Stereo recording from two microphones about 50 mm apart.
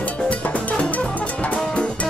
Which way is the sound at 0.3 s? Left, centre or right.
Left.